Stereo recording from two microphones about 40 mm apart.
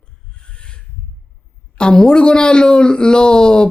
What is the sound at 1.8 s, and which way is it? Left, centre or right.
Speech, left.